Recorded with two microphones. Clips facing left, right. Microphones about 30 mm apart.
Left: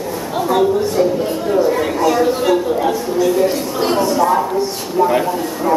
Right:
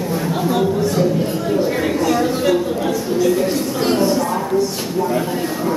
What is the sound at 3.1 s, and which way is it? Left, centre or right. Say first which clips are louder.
A woman's voice: left 1 dB; centre.